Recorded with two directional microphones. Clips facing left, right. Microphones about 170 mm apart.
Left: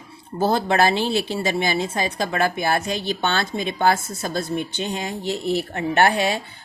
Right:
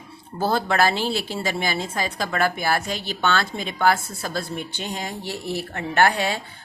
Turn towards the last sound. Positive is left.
turn(degrees=20)  # may be behind; listen again after turning